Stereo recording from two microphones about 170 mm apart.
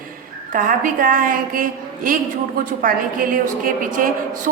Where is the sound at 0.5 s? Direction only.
55° right (ahead or behind).